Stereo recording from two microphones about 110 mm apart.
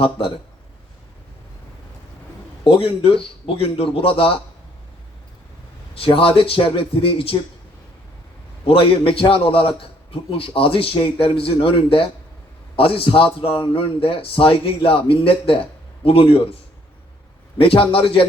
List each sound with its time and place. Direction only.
0.0 s a man's voice: 55° left (ahead or behind)
2.6 s a man's voice: 55° left (ahead or behind)
5.9 s a man's voice: 55° left (ahead or behind)
8.6 s a man's voice: 55° left (ahead or behind)
17.6 s a man's voice: 55° left (ahead or behind)